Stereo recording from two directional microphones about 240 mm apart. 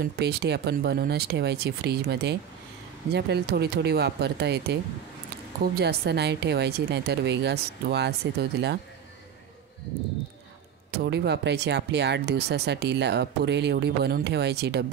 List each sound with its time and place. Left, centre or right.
0.0 s speech: right
5.8 s speech: right
10.9 s speech: right